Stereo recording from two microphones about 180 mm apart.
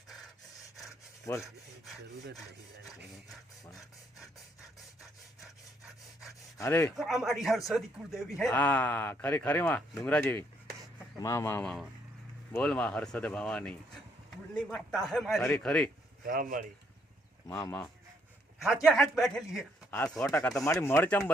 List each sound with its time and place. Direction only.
1.3 s speech: 15° left (ahead or behind)
6.2 s sawing: 15° left (ahead or behind)
6.9 s a man's voice: centre (ahead or behind)
16.2 s speech: 50° right (ahead or behind)
17.4 s speech: 15° left (ahead or behind)
18.6 s a man's voice: 5° right (ahead or behind)